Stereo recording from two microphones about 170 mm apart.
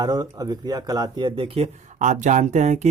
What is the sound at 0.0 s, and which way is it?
Speech, 25° right (ahead or behind).